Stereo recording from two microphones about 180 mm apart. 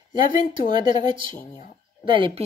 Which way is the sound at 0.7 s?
25° right (ahead or behind).